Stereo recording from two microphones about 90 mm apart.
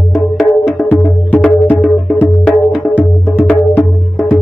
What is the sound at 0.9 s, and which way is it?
Music, 10° left (ahead or behind).